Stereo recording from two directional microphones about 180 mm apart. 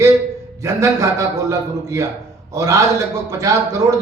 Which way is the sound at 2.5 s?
20° right (ahead or behind).